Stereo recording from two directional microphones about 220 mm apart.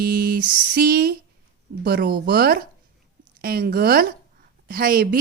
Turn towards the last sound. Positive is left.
turn(degrees=-40)  # may be behind; listen again after turning